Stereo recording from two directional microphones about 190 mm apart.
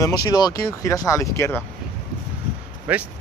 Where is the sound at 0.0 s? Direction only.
20° left (ahead or behind).